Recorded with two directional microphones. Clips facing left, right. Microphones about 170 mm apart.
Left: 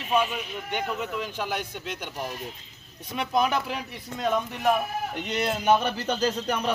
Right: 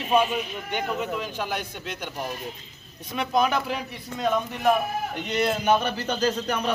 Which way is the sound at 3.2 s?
5° left (ahead or behind).